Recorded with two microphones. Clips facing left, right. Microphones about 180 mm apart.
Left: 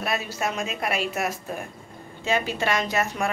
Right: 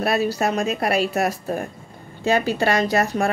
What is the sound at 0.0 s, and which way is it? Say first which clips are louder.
A woman's voice: right 7 dB; 35° right (ahead or behind).